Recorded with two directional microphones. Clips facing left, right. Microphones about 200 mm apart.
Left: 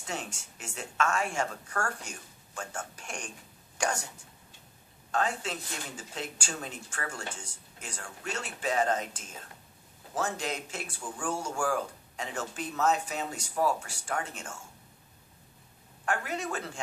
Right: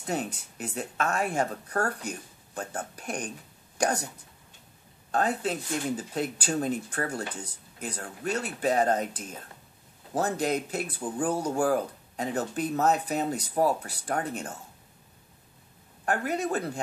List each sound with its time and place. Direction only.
0.0 s speech: 35° right (ahead or behind)
5.1 s speech: 35° right (ahead or behind)
16.1 s speech: 35° right (ahead or behind)